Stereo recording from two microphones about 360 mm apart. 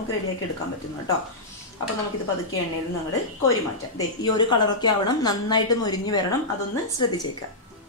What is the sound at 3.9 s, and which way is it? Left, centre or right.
A woman's voice, centre.